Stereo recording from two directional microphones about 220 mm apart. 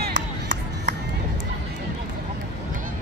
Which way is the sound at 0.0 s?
35° right (ahead or behind).